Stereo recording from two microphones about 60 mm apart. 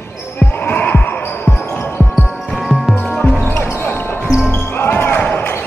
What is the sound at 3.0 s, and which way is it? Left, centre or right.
Music, centre.